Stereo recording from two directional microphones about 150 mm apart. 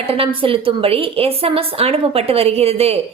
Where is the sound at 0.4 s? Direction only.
35° right (ahead or behind).